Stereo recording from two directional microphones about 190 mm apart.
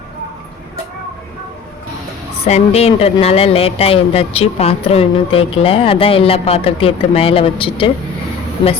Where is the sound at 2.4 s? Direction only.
35° left (ahead or behind).